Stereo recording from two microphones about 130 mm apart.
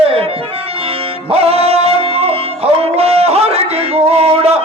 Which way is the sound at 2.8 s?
50° right (ahead or behind).